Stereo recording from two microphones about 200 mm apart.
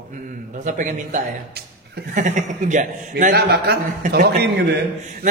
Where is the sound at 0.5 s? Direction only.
40° right (ahead or behind); by 4.6 s 55° right (ahead or behind).